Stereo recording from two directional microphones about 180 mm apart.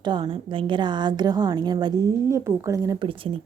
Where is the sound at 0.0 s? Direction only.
25° right (ahead or behind).